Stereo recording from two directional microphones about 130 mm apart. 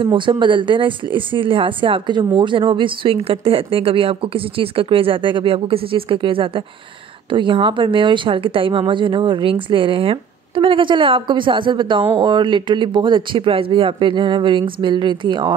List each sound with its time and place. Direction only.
0.0 s speech: 40° right (ahead or behind)